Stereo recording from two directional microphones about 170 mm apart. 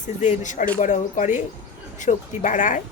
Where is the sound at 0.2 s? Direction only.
45° left (ahead or behind).